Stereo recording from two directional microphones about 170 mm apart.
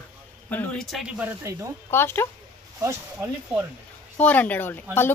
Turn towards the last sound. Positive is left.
turn(degrees=10)  # may be behind; listen again after turning